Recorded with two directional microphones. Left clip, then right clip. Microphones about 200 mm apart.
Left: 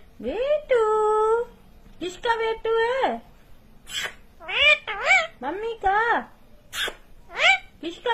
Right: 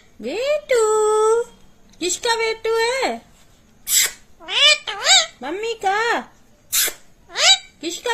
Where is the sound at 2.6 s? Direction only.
70° right (ahead or behind).